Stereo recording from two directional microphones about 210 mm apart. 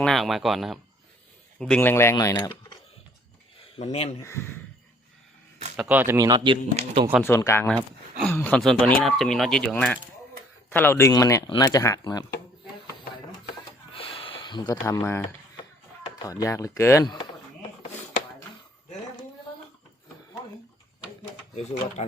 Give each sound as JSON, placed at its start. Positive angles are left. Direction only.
{"t": 0.0, "sound": "speech", "side_deg": 0}
{"t": 4.2, "sound": "speech", "side_deg": 15}
{"t": 5.7, "sound": "speech", "side_deg": -10}
{"t": 7.3, "sound": "speech", "side_deg": 10}
{"t": 13.9, "sound": "a sound", "side_deg": 25}
{"t": 16.1, "sound": "speech", "side_deg": 15}
{"t": 21.5, "sound": "speech", "side_deg": 30}